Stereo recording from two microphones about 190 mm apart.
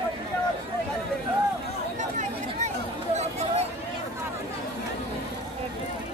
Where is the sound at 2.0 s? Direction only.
40° right (ahead or behind).